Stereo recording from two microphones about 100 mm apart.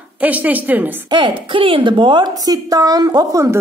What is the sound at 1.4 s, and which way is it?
Speech, 60° right (ahead or behind).